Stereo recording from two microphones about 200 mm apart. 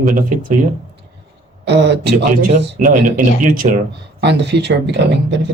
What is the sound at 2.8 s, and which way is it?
Speech, 45° right (ahead or behind).